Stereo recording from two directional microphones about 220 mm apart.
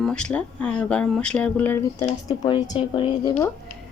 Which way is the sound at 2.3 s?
20° left (ahead or behind).